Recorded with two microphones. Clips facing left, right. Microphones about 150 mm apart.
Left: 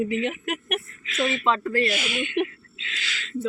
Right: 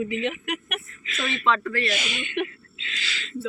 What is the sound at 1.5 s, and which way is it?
Speech, 35° left (ahead or behind).